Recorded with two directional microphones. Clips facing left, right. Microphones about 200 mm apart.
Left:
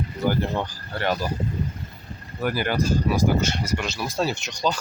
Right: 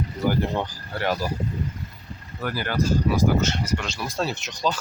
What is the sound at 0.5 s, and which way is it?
Speech, 15° right (ahead or behind).